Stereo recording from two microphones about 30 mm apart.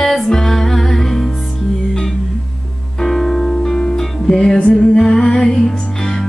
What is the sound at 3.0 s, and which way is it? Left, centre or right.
Music, centre.